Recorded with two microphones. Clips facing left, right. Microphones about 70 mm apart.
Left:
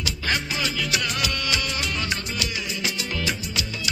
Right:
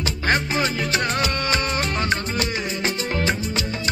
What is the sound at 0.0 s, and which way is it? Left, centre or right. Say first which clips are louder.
Music: right 5 dB; right.